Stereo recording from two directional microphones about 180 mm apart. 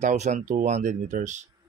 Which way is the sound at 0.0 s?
40° right (ahead or behind).